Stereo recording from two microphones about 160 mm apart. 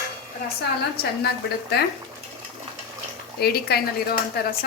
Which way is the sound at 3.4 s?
75° left (ahead or behind).